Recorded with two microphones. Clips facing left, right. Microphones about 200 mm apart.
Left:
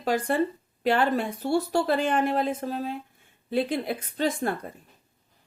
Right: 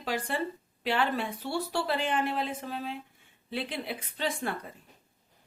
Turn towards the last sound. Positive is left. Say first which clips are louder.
# left 6 dB
turn(degrees=45)  # may be behind; listen again after turning